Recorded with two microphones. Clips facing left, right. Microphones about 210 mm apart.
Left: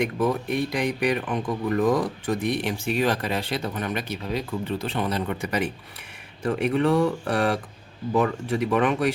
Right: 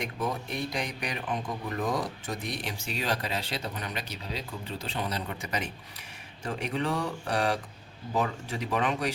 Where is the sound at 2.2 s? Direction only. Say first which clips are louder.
Left 10 dB; 55° left (ahead or behind).